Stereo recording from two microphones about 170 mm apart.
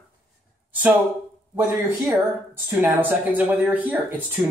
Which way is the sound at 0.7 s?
10° right (ahead or behind).